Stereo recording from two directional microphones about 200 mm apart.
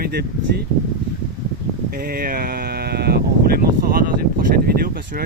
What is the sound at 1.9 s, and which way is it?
Speech, 50° right (ahead or behind).